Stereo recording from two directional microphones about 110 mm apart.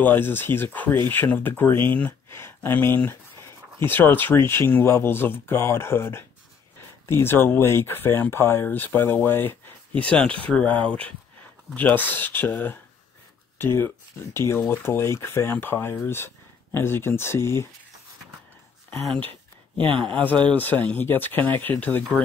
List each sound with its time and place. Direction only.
0.0 s speech: 20° left (ahead or behind)
20.5 s speech: 15° left (ahead or behind)